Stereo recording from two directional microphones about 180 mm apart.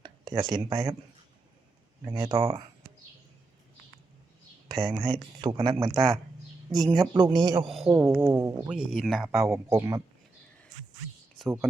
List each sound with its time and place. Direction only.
0.0 s a sound: 25° right (ahead or behind)
0.5 s speech: 25° right (ahead or behind)
2.0 s speech: 20° right (ahead or behind)
4.8 s speech: centre (ahead or behind)
5.0 s speech: 25° right (ahead or behind)
5.9 s speech: centre (ahead or behind)
6.7 s speech: 20° right (ahead or behind)
8.7 s speech: centre (ahead or behind)
9.3 s speech: 15° right (ahead or behind)
11.6 s speech: centre (ahead or behind)